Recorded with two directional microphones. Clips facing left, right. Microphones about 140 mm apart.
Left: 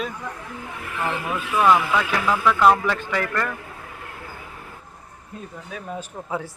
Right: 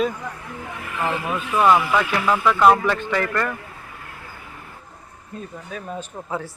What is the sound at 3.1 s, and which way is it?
Speech, 5° left (ahead or behind).